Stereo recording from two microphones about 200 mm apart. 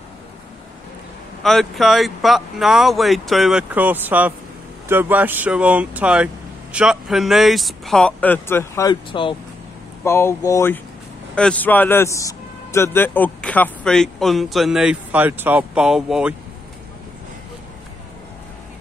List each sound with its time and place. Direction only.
1.4 s speech: centre (ahead or behind)
9.1 s speech: 25° left (ahead or behind)
10.0 s speech: 15° left (ahead or behind); by 16.3 s 5° right (ahead or behind)